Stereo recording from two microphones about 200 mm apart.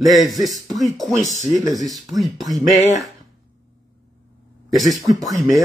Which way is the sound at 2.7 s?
35° left (ahead or behind).